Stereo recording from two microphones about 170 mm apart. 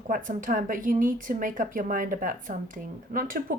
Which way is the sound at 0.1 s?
50° right (ahead or behind).